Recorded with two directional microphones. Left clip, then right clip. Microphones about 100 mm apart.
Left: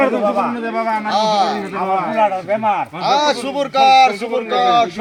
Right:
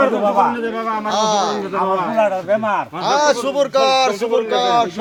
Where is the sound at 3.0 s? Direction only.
55° right (ahead or behind).